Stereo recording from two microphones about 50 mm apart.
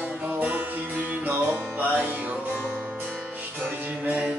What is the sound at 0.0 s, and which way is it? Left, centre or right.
Music, right.